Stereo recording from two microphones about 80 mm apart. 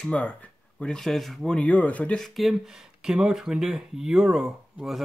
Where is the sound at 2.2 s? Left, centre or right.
Centre.